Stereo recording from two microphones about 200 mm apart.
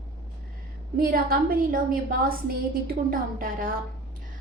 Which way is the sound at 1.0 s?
50° right (ahead or behind).